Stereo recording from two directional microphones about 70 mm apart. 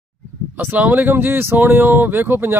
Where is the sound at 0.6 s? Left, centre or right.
Right.